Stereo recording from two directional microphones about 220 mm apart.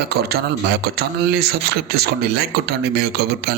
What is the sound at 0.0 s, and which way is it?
Speech, 45° right (ahead or behind).